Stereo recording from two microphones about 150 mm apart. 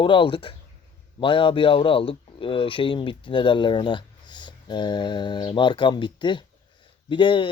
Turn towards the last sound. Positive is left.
turn(degrees=35)  # may be behind; listen again after turning